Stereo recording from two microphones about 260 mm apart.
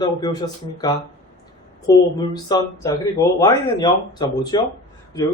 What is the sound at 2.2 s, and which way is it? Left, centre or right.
A man's voice, centre.